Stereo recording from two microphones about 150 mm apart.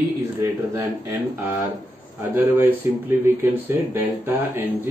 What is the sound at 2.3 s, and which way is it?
Speech, 15° right (ahead or behind).